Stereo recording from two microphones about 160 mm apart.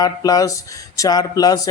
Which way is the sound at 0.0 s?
25° left (ahead or behind).